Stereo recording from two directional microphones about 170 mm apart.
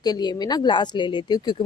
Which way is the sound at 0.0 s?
25° left (ahead or behind).